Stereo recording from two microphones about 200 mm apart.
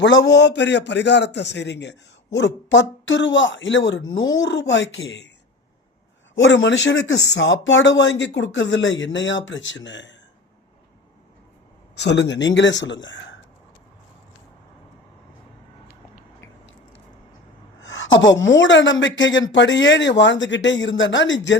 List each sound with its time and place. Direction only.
0.0 s a man's voice: 65° left (ahead or behind)
6.3 s a woman's voice: 70° left (ahead or behind)
12.0 s a man's voice: 60° left (ahead or behind)
17.7 s a woman's voice: 70° left (ahead or behind)